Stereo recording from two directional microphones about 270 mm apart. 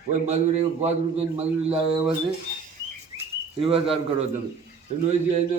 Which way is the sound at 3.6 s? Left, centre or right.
Centre.